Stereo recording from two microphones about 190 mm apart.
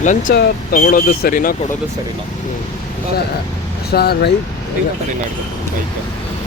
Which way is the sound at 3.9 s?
55° left (ahead or behind).